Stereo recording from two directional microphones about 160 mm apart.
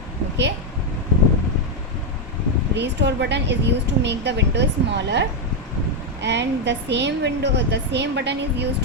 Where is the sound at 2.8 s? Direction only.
90° right.